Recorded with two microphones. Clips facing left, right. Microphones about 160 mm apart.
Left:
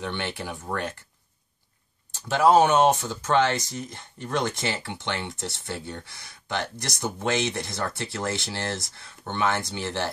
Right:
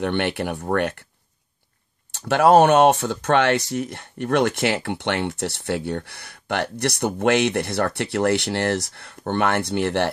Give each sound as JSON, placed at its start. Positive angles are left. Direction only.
{"t": 0.0, "sound": "speech", "side_deg": -65}
{"t": 2.1, "sound": "speech", "side_deg": -70}